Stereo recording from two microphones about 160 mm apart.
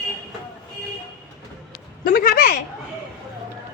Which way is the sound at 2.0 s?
65° left (ahead or behind).